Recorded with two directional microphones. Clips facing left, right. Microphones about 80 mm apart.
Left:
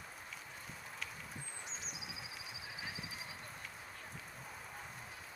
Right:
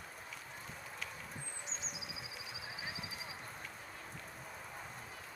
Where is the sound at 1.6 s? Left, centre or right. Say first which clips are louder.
Right 1 dB; right.